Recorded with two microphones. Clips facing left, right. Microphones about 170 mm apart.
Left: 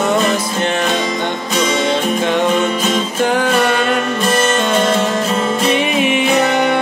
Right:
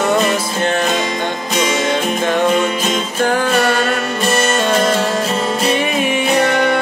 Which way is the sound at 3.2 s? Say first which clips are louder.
Even; 15° left (ahead or behind).